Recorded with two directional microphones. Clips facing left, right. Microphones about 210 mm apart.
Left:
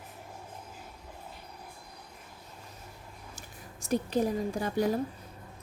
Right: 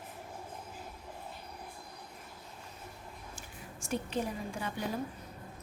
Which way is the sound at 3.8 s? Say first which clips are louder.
Left 6 dB; 40° left (ahead or behind).